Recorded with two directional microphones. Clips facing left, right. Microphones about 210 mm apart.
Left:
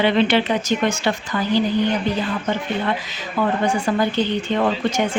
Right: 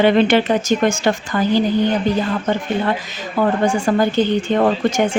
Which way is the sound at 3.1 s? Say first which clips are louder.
Right 3 dB; 45° right (ahead or behind).